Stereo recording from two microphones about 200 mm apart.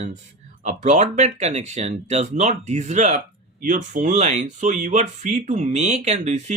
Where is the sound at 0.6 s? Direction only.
35° right (ahead or behind).